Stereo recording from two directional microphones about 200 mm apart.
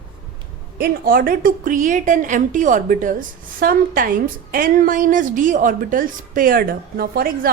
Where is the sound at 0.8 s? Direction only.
45° right (ahead or behind).